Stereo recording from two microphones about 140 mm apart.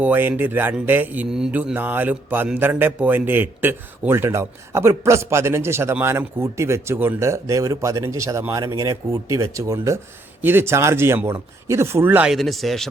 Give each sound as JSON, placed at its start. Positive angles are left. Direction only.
{"t": 0.0, "sound": "speech", "side_deg": -15}
{"t": 12.3, "sound": "a man's voice", "side_deg": 0}